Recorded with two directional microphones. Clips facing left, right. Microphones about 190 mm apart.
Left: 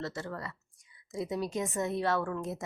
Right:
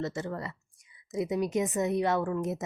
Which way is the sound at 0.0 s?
20° right (ahead or behind).